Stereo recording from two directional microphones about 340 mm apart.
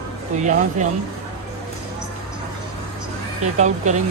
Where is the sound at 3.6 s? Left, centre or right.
Right.